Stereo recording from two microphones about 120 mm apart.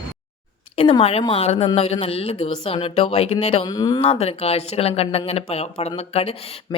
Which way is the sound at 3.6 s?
35° left (ahead or behind).